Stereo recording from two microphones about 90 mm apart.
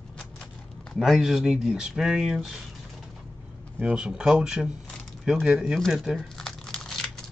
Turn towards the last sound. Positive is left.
turn(degrees=5)  # may be behind; listen again after turning